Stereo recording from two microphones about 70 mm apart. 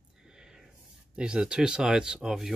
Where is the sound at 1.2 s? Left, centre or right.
Centre.